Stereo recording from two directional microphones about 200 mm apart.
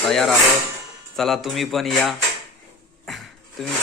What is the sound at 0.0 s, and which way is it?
Speech, centre (ahead or behind).